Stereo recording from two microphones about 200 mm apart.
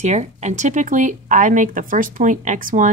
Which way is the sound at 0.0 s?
35° right (ahead or behind).